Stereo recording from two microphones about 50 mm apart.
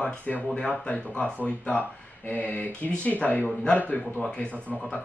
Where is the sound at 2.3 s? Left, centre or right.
Left.